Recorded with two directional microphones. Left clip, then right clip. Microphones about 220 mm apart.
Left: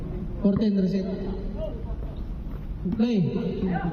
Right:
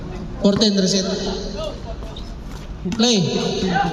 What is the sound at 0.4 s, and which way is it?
Speech, 40° right (ahead or behind).